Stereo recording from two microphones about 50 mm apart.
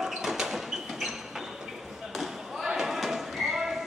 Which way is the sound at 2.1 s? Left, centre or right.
Centre.